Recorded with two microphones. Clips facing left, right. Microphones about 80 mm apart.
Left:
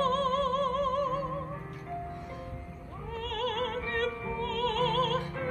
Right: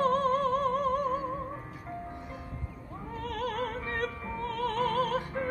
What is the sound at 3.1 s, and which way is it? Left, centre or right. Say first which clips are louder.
Opera: left 1 dB; right.